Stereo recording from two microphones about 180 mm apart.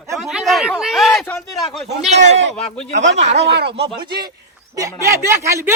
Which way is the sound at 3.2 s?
35° right (ahead or behind).